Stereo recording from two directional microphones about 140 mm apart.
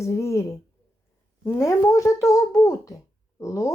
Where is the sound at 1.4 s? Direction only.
20° left (ahead or behind).